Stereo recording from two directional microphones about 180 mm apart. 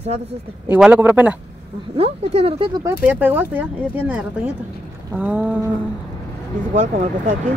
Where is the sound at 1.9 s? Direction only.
35° right (ahead or behind).